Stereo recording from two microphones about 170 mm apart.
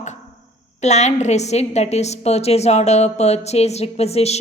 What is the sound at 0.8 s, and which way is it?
A woman's voice, 40° left (ahead or behind).